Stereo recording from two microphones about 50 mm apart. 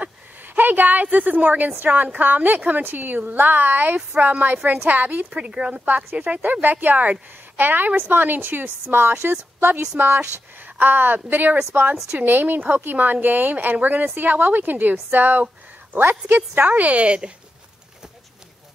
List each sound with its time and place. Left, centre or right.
0.6 s a woman's voice: right
5.3 s a woman's voice: right